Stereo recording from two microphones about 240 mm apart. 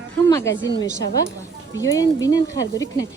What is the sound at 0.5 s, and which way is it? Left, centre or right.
Speech, left.